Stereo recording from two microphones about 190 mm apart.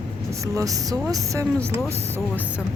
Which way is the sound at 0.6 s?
15° right (ahead or behind).